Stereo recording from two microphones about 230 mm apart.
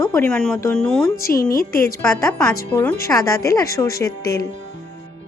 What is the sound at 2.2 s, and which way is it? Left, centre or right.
Speech, centre.